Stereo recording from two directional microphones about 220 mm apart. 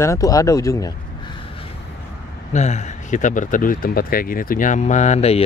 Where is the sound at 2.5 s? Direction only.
30° left (ahead or behind).